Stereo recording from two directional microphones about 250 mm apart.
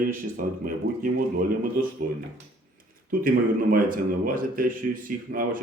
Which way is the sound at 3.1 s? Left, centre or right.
Right.